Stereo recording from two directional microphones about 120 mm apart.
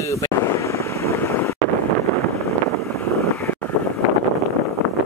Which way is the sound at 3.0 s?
15° left (ahead or behind).